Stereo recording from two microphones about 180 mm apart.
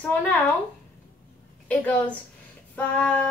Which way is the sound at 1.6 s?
10° left (ahead or behind).